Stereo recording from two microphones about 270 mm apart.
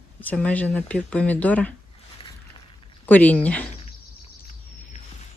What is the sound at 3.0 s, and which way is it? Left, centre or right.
Speech, centre.